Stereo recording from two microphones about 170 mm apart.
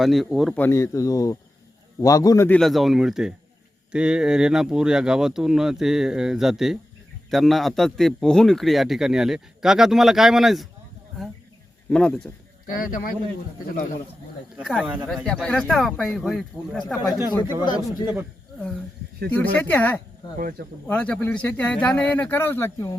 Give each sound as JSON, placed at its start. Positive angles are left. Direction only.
{"t": 0.0, "sound": "a man's voice", "side_deg": 0}
{"t": 0.6, "sound": "speech", "side_deg": 20}
{"t": 2.5, "sound": "a man's voice", "side_deg": 0}
{"t": 11.9, "sound": "a man's voice", "side_deg": 5}
{"t": 12.8, "sound": "speech", "side_deg": 55}
{"t": 14.5, "sound": "a man's voice", "side_deg": 0}
{"t": 17.4, "sound": "speech", "side_deg": -15}
{"t": 17.7, "sound": "speech", "side_deg": 25}
{"t": 19.5, "sound": "speech", "side_deg": 10}
{"t": 20.4, "sound": "speech", "side_deg": -60}
{"t": 20.8, "sound": "speech", "side_deg": 10}